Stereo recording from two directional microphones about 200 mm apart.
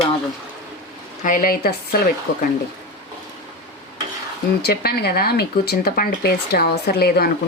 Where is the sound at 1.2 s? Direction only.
45° left (ahead or behind).